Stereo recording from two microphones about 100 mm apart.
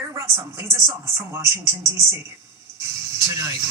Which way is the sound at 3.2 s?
35° right (ahead or behind).